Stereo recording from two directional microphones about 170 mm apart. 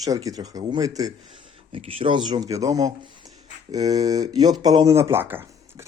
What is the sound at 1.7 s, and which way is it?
Speech, 35° right (ahead or behind).